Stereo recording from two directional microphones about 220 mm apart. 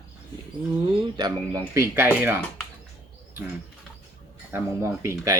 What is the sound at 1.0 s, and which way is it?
Speech, 15° right (ahead or behind).